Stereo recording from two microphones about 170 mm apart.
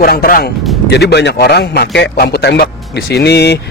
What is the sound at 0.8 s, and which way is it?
A man's voice, 80° left.